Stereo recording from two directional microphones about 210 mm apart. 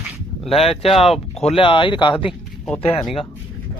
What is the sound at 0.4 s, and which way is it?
Speech, 30° left (ahead or behind).